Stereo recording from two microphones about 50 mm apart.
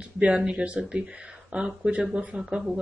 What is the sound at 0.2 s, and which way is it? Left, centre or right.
Speech, right.